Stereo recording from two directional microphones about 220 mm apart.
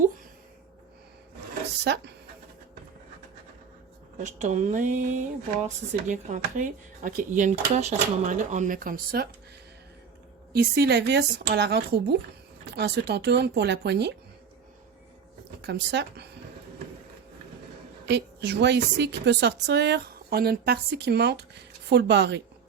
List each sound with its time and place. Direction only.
1.8 s a woman's voice: 50° right (ahead or behind)
4.3 s speech: 35° right (ahead or behind)
10.5 s a woman's voice: 45° right (ahead or behind)
15.6 s a woman's voice: 50° right (ahead or behind)
18.0 s a woman's voice: 50° right (ahead or behind)